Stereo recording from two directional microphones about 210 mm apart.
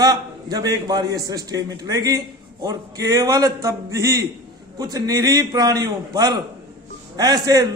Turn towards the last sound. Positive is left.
turn(degrees=-20)  # may be behind; listen again after turning